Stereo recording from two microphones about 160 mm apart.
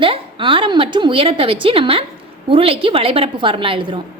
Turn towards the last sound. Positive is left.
turn(degrees=-30)  # may be behind; listen again after turning